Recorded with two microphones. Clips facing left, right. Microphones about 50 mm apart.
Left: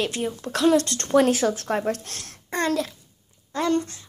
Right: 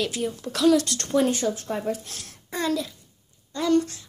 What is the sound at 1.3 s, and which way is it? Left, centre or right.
Speech, left.